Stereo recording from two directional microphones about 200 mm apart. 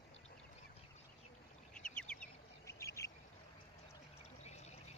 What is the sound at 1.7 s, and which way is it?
Duck, 5° left (ahead or behind).